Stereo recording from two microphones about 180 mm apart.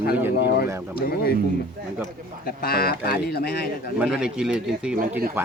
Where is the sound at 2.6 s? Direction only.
60° left (ahead or behind).